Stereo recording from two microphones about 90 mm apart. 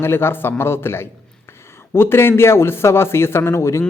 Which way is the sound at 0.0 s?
25° left (ahead or behind).